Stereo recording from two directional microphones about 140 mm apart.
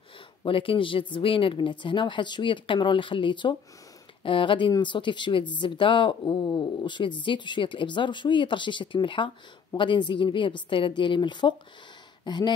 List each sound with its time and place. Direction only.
0.4 s speech: 40° left (ahead or behind)